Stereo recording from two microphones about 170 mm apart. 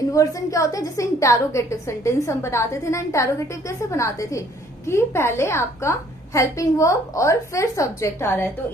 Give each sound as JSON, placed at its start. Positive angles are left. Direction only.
{"t": 0.1, "sound": "a woman's voice", "side_deg": 20}